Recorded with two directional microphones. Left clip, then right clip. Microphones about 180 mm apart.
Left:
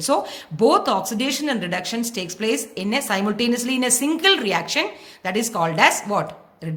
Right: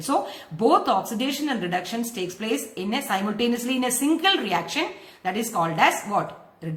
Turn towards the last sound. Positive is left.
turn(degrees=45)  # may be behind; listen again after turning